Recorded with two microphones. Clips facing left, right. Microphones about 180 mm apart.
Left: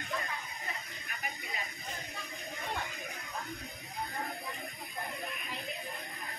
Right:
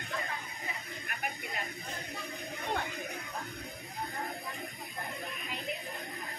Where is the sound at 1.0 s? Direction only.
60° right (ahead or behind).